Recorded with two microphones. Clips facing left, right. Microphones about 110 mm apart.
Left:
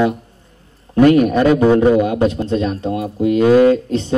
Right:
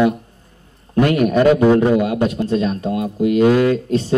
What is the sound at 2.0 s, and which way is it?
A man's voice, 25° left (ahead or behind).